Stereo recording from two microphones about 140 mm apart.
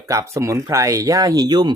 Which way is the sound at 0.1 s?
25° right (ahead or behind).